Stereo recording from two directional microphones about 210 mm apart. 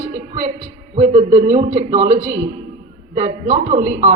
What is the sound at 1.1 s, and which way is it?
Music, 30° right (ahead or behind).